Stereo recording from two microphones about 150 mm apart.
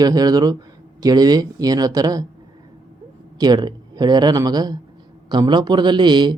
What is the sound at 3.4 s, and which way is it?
A man's voice, 30° right (ahead or behind).